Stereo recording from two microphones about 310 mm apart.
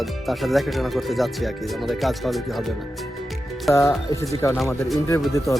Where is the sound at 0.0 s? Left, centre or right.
Centre.